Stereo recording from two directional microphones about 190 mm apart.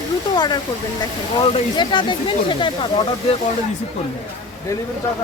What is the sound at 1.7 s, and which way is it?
Speech, 25° left (ahead or behind).